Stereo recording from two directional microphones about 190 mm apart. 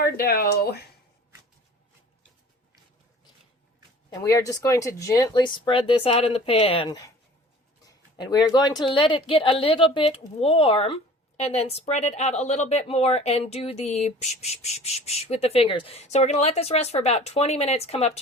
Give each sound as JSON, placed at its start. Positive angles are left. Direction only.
{"t": 0.0, "sound": "speech", "side_deg": 55}
{"t": 4.1, "sound": "speech", "side_deg": 20}